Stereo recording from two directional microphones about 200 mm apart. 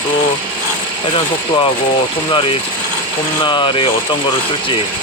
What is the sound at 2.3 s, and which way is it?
Speech, 25° left (ahead or behind).